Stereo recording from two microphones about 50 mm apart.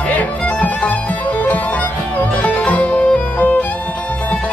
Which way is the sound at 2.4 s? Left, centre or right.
Left.